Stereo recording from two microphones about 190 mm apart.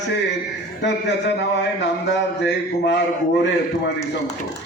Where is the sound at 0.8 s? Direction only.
65° left (ahead or behind).